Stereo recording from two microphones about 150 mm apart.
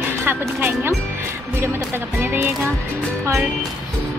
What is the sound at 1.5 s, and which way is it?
A woman's voice, 15° right (ahead or behind).